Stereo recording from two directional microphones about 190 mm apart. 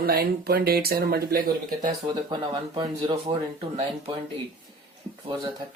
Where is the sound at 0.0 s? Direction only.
55° right (ahead or behind).